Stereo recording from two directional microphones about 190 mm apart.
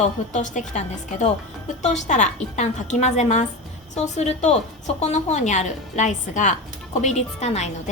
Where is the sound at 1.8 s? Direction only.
40° left (ahead or behind).